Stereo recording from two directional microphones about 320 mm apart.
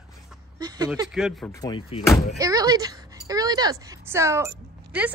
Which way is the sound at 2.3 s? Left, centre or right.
Centre.